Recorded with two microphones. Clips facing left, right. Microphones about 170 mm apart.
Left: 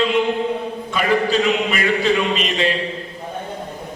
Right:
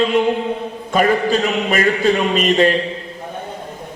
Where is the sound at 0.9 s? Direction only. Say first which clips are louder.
Right 3 dB; 45° right (ahead or behind).